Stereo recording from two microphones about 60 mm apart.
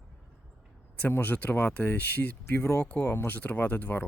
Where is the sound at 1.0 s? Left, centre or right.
Left.